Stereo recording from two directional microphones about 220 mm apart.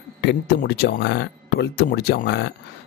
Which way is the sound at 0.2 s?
50° left (ahead or behind).